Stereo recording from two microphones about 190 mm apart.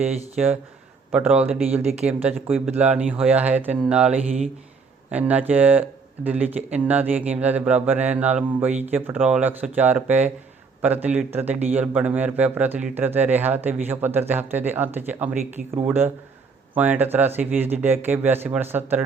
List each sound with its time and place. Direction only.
0.0 s a man's voice: 5° right (ahead or behind)
1.8 s speech: 35° right (ahead or behind)
2.0 s speech: 10° right (ahead or behind)